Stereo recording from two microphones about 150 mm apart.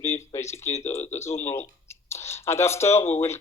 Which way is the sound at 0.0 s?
20° left (ahead or behind).